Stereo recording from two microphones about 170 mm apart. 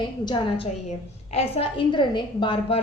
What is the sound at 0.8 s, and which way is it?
A woman's voice, 40° left (ahead or behind).